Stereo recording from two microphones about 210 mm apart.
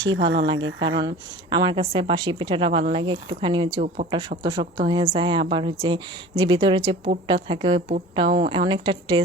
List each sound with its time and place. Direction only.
0.0 s speech: 60° right (ahead or behind)
1.0 s a woman's voice: 20° right (ahead or behind)